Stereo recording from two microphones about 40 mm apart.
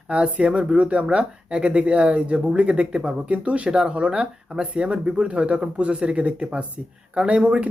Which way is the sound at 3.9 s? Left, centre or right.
Right.